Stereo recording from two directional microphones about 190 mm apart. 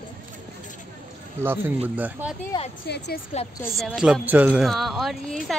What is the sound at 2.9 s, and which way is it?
Speech, 60° left (ahead or behind).